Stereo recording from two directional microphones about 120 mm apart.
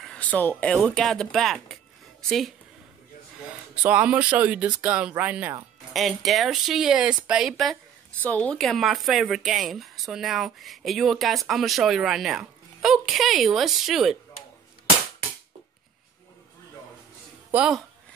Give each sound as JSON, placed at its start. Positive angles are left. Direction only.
{"t": 0.0, "sound": "a sound", "side_deg": 10}
{"t": 0.7, "sound": "speech", "side_deg": 5}
{"t": 3.8, "sound": "speech", "side_deg": -10}
{"t": 5.9, "sound": "speech", "side_deg": 0}
{"t": 8.2, "sound": "speech", "side_deg": 10}